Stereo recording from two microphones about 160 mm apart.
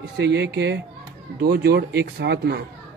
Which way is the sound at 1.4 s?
75° right (ahead or behind).